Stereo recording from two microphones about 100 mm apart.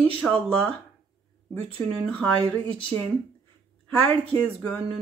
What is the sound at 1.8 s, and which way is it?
Speech, 65° right (ahead or behind).